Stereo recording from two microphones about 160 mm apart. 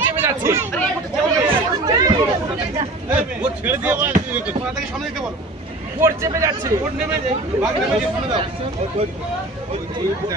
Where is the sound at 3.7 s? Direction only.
10° right (ahead or behind).